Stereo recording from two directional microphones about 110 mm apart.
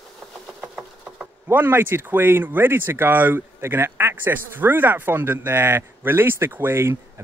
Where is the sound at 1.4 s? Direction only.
20° right (ahead or behind).